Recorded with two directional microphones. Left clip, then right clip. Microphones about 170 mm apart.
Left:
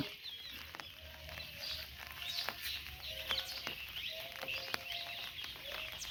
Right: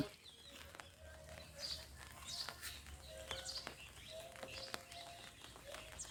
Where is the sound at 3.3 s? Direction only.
20° right (ahead or behind).